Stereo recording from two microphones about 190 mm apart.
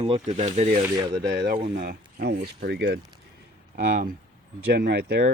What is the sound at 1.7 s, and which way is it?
Speech, 50° right (ahead or behind).